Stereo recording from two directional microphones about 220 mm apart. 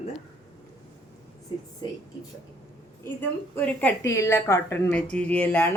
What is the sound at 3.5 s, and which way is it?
A woman's voice, 5° left (ahead or behind).